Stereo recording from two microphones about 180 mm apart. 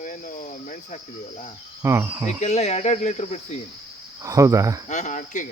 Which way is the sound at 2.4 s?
35° left (ahead or behind).